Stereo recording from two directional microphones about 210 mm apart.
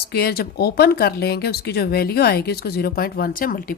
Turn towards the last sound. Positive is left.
turn(degrees=40)  # may be behind; listen again after turning